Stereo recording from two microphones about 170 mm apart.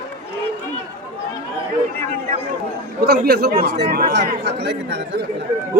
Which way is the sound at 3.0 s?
65° right (ahead or behind).